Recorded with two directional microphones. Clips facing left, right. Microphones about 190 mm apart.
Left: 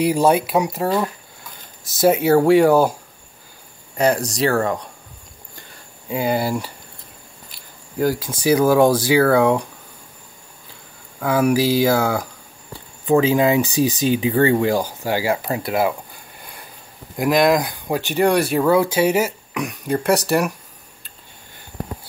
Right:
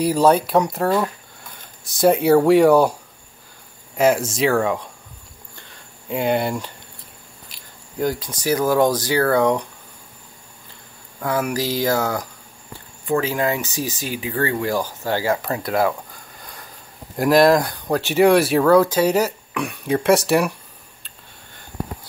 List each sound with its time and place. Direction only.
0.0 s speech: 10° left (ahead or behind)
3.9 s speech: centre (ahead or behind)
6.0 s speech: centre (ahead or behind)
8.0 s speech: 5° left (ahead or behind)
11.1 s speech: 10° left (ahead or behind)
13.0 s speech: 20° left (ahead or behind)
17.2 s speech: centre (ahead or behind)
18.6 s speech: 10° left (ahead or behind)